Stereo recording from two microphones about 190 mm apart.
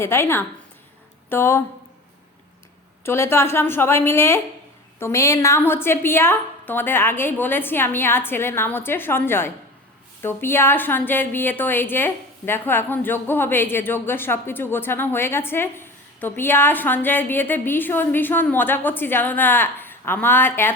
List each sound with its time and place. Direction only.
0.0 s a woman's voice: 15° left (ahead or behind)
3.0 s a woman's voice: 10° left (ahead or behind)